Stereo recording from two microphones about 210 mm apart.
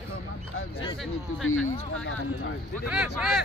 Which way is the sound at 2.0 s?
75° left (ahead or behind).